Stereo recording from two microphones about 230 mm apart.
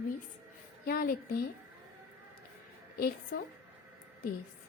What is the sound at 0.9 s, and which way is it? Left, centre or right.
Speech, left.